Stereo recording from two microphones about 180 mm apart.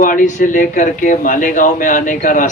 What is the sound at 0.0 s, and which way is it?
Speech, 50° left (ahead or behind).